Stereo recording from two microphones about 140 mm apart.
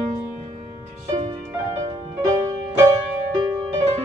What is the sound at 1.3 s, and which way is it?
Music, 30° right (ahead or behind).